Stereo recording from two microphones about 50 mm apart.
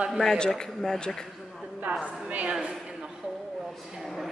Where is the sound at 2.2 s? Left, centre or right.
Right.